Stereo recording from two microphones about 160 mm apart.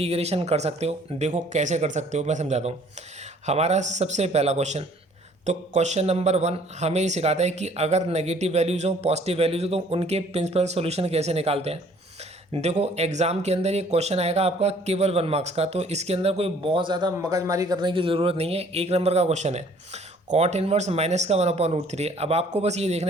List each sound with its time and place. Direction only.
0.0 s speech: 40° right (ahead or behind)